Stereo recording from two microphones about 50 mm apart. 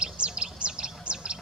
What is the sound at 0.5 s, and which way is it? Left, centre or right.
Bird, centre.